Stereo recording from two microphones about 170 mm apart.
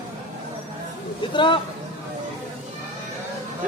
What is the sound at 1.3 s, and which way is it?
Speech, 30° left (ahead or behind).